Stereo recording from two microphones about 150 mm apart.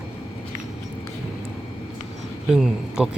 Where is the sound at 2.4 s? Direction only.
5° right (ahead or behind).